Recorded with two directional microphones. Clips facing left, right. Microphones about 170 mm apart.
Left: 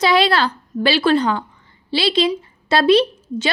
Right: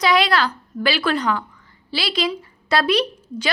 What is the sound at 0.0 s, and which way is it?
A woman's voice, 30° left (ahead or behind).